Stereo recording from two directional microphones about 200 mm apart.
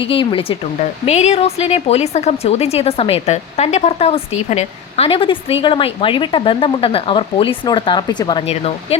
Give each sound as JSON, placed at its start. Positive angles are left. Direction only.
{"t": 0.1, "sound": "a woman's voice", "side_deg": 25}